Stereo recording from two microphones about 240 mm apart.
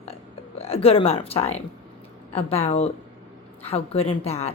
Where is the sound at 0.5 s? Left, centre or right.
Left.